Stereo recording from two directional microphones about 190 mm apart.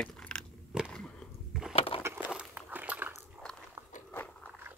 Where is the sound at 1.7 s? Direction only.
30° left (ahead or behind).